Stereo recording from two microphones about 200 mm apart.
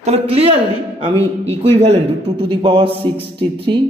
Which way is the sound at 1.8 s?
30° right (ahead or behind).